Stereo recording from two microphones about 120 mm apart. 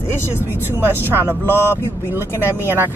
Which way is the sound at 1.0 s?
20° right (ahead or behind).